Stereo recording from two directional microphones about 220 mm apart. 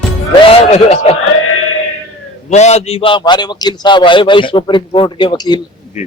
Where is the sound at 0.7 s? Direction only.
30° left (ahead or behind).